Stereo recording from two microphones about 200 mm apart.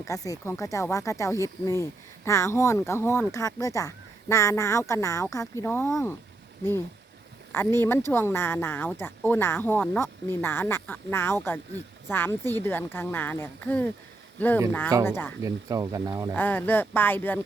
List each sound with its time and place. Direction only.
0.0 s speech: 15° left (ahead or behind)
7.5 s speech: 10° left (ahead or behind)
15.4 s speech: 15° right (ahead or behind)
16.3 s speech: 10° left (ahead or behind)